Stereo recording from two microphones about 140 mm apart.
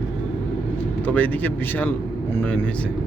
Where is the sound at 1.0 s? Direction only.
10° left (ahead or behind).